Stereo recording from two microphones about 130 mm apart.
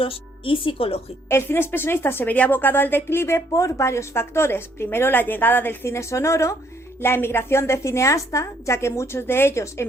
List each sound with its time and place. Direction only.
0.0 s speech: 45° left (ahead or behind)
1.3 s a woman's voice: 20° left (ahead or behind)